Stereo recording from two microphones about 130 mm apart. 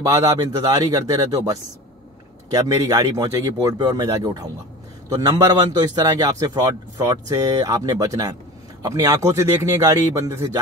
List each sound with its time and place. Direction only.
0.0 s speech: 25° right (ahead or behind)